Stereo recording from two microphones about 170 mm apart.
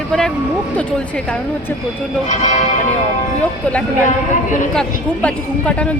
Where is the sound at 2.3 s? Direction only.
45° left (ahead or behind).